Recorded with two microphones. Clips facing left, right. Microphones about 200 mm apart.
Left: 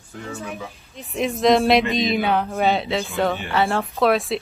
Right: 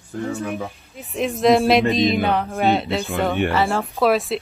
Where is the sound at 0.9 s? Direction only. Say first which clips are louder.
Left 1 dB; centre (ahead or behind).